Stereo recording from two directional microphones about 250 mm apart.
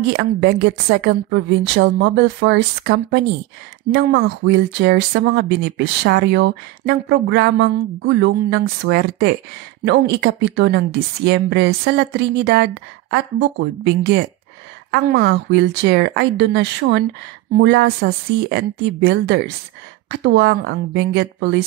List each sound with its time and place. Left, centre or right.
0.1 s a woman's voice: right